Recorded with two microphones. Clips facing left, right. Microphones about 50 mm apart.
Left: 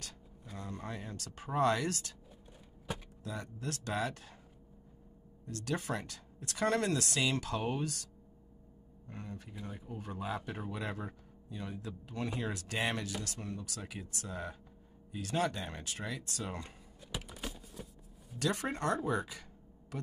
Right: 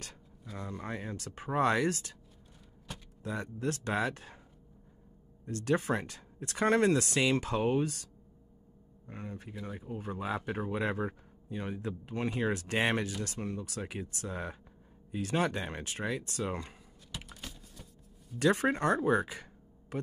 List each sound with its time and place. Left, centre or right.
0.6 s speech: right
2.9 s a sound: centre
3.3 s speech: right
5.4 s speech: right
17.3 s a sound: centre
18.4 s speech: right